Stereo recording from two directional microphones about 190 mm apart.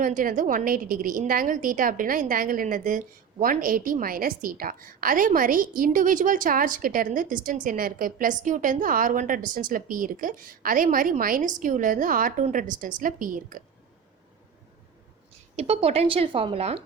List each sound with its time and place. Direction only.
0.0 s a woman's voice: 45° right (ahead or behind)
15.5 s speech: 35° right (ahead or behind)